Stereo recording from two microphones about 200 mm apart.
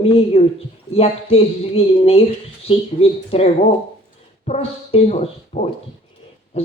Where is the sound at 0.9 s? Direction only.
30° left (ahead or behind).